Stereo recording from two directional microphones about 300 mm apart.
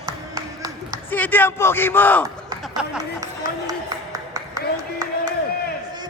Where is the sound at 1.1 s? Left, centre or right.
Centre.